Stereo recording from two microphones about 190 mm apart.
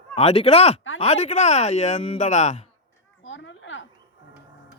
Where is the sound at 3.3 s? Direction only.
80° left.